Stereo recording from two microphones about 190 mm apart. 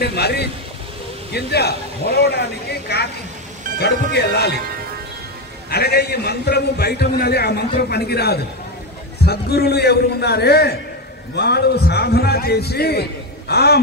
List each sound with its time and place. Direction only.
0.0 s a man's voice: 60° left (ahead or behind)
5.7 s a man's voice: 55° left (ahead or behind)